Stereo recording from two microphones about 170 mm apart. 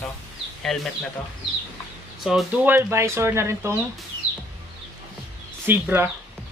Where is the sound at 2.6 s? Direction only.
15° right (ahead or behind).